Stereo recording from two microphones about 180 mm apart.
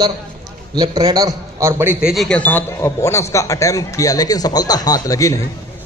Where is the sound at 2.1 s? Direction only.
5° left (ahead or behind); by 5.3 s 20° left (ahead or behind).